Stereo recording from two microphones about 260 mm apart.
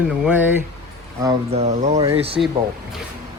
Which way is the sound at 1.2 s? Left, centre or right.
Right.